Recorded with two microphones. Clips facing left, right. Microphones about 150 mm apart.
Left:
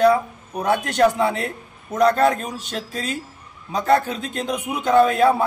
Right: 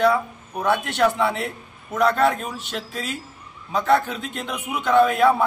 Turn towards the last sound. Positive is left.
turn(degrees=35)  # may be behind; listen again after turning